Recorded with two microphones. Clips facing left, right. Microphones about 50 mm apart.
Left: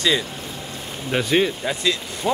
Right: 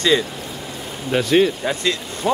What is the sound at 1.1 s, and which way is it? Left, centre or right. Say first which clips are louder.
Speech: right 4 dB; centre.